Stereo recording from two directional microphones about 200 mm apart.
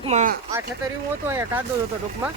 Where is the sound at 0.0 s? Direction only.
35° right (ahead or behind).